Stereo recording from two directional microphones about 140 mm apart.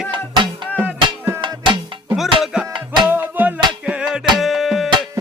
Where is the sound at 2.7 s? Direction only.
35° right (ahead or behind).